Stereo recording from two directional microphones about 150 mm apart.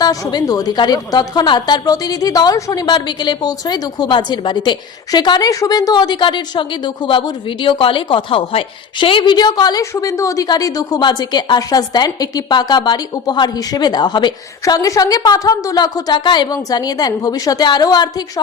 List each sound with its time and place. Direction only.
0.0 s a woman's voice: 25° left (ahead or behind)